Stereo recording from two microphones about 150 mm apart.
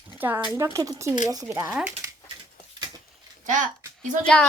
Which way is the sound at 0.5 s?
20° right (ahead or behind).